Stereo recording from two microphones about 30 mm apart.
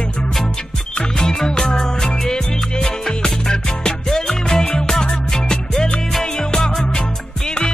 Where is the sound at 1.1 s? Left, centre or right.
Centre.